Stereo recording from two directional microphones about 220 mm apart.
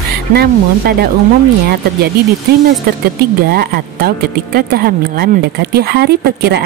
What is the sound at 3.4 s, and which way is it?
Speech, 45° right (ahead or behind).